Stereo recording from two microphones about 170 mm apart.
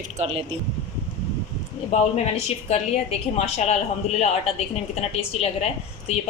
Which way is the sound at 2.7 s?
35° left (ahead or behind).